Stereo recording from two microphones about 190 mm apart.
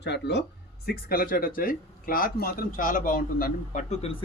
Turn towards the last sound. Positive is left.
turn(degrees=40)  # may be behind; listen again after turning